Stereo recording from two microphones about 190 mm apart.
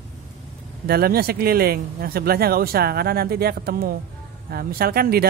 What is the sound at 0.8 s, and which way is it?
Speech, 55° right (ahead or behind).